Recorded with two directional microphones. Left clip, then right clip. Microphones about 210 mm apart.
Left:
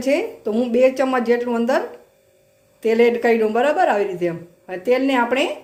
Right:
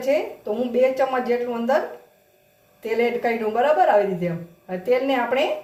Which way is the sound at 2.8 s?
45° left (ahead or behind).